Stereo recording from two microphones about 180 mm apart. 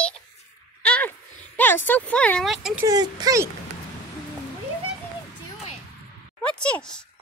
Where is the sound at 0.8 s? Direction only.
5° left (ahead or behind).